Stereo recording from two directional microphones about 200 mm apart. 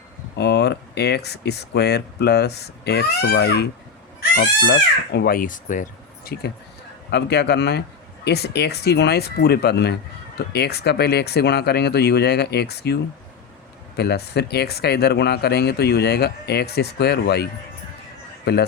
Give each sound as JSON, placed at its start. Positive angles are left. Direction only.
{"t": 0.3, "sound": "speech", "side_deg": 55}